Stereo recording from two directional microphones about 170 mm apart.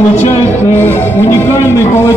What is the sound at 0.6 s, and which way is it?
Speech, 15° left (ahead or behind).